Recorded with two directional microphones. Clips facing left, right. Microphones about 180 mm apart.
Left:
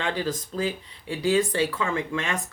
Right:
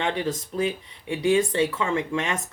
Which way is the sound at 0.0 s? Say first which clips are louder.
Right 2 dB; 20° right (ahead or behind).